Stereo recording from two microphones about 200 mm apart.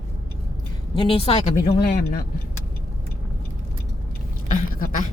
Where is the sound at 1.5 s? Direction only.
45° left (ahead or behind).